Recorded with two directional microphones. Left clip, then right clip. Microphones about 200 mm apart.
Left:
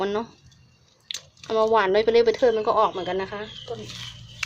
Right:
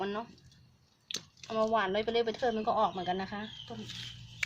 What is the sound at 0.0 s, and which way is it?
A woman's voice, 30° left (ahead or behind).